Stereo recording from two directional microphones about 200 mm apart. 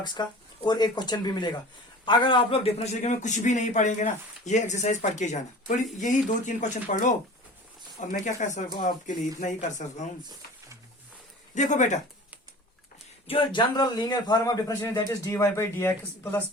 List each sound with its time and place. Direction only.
0.0 s a man's voice: 20° left (ahead or behind); by 10.1 s 35° left (ahead or behind)
11.5 s a man's voice: 35° left (ahead or behind)
13.2 s a man's voice: 25° left (ahead or behind)